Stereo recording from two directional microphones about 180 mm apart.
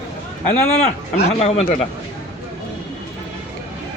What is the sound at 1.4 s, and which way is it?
Speech, 35° left (ahead or behind).